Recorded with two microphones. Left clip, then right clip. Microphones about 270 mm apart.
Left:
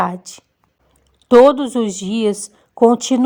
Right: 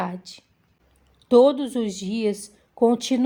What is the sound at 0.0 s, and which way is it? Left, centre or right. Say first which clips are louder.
A woman's voice: left 10 dB; left.